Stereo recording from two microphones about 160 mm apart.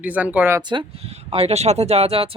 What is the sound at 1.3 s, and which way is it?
Speech, 40° right (ahead or behind).